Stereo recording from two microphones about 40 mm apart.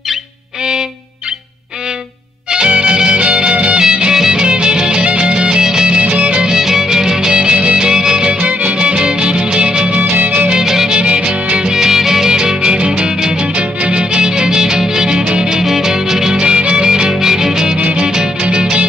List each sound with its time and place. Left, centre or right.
2.5 s music: right
6.4 s music: centre
8.4 s music: right
8.7 s music: right
10.1 s music: right
10.5 s music: centre
11.0 s music: right
17.7 s music: right
18.0 s music: centre